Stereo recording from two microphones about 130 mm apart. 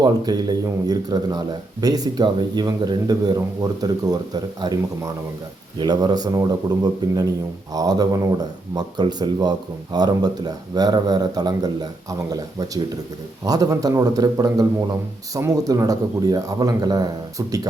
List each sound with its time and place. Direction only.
0.0 s speech: 30° right (ahead or behind)
5.8 s speech: 35° right (ahead or behind)